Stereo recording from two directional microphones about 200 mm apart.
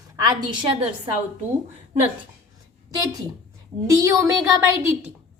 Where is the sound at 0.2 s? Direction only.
20° right (ahead or behind).